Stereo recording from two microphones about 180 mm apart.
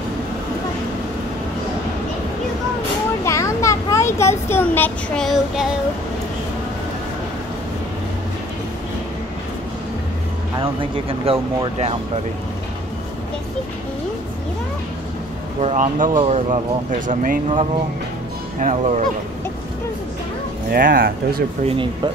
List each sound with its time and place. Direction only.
3.3 s a sound: 15° left (ahead or behind); by 5.8 s centre (ahead or behind)
10.6 s speech: 30° right (ahead or behind)
15.6 s speech: 40° right (ahead or behind)
17.1 s speech: 50° right (ahead or behind)
18.6 s speech: 45° right (ahead or behind)
20.7 s speech: 55° right (ahead or behind)
21.6 s speech: 30° right (ahead or behind)